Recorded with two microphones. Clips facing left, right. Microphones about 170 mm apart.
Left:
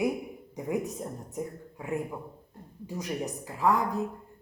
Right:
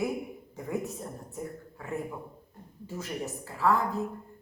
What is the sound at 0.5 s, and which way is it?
Speech, 15° left (ahead or behind).